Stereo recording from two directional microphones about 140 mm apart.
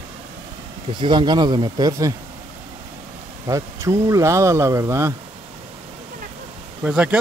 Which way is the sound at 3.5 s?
20° right (ahead or behind).